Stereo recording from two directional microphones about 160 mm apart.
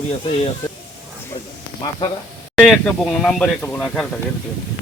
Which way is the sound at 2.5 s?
5° left (ahead or behind).